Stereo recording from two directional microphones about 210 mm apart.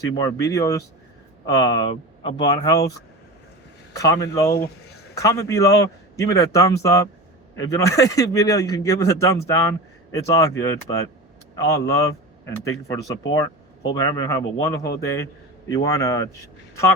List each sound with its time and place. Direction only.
0.3 s speech: 15° left (ahead or behind)
3.9 s speech: 15° left (ahead or behind)